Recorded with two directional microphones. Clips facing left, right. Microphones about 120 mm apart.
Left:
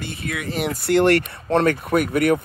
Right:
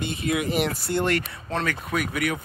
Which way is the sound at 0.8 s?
70° left (ahead or behind).